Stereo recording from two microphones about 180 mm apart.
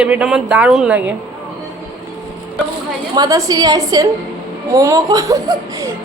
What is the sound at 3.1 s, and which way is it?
A woman's voice, 20° right (ahead or behind).